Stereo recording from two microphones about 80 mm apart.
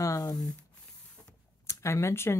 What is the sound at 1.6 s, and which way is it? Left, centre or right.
Speech, left.